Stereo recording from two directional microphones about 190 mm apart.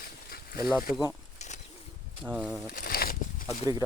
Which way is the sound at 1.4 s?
35° left (ahead or behind).